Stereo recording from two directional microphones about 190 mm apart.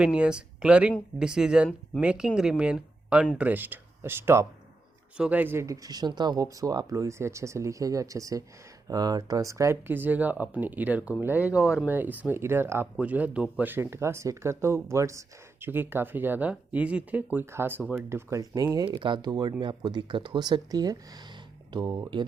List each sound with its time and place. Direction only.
0.0 s speech: 5° right (ahead or behind); by 22.3 s 25° right (ahead or behind)